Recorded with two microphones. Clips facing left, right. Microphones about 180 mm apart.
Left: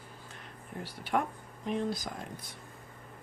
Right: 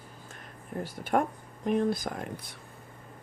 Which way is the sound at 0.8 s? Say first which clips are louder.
Right 4 dB; 50° right (ahead or behind).